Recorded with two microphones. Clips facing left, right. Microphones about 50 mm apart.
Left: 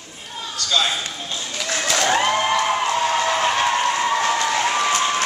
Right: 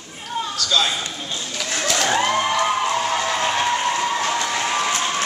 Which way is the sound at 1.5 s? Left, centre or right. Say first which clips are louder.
Left 1 dB; centre.